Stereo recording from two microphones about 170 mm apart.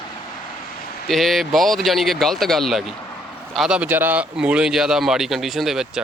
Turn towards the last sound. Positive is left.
turn(degrees=-5)  # may be behind; listen again after turning